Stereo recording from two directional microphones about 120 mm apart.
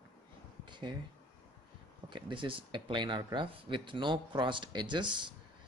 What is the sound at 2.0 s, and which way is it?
Speech, 40° right (ahead or behind).